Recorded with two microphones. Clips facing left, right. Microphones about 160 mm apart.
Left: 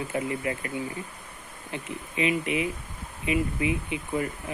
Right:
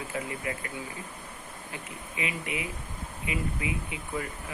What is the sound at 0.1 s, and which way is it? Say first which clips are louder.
Speech: left 5 dB; 25° left (ahead or behind).